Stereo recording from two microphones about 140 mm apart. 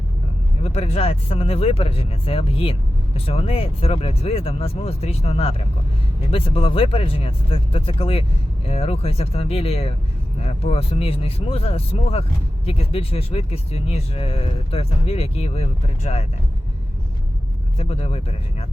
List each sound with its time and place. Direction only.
0.6 s speech: 45° left (ahead or behind)
17.7 s speech: 45° left (ahead or behind)